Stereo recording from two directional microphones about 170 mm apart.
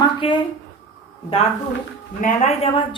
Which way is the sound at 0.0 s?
30° left (ahead or behind).